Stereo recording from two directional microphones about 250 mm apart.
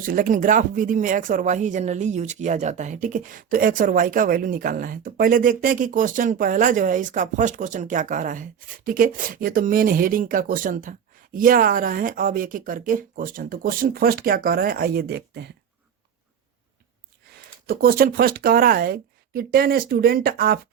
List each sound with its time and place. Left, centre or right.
0.0 s speech: right
17.3 s speech: right